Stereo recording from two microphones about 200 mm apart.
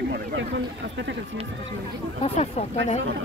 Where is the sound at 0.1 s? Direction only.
65° right (ahead or behind).